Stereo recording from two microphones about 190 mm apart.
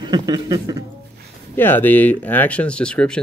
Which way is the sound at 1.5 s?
10° left (ahead or behind).